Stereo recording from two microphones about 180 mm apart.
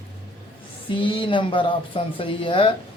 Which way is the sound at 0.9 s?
30° left (ahead or behind).